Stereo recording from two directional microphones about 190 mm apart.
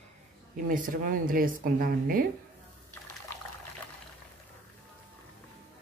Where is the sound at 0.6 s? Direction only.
45° right (ahead or behind).